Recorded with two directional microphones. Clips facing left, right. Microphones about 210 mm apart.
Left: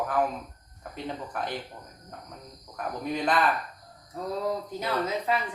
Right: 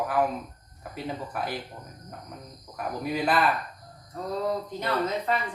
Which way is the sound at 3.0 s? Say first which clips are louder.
Right 1 dB; 5° right (ahead or behind).